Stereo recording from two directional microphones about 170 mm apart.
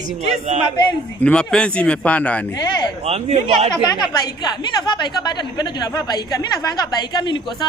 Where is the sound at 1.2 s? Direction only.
5° left (ahead or behind).